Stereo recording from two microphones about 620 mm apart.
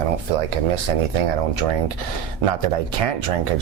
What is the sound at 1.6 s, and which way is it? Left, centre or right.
Speech, right.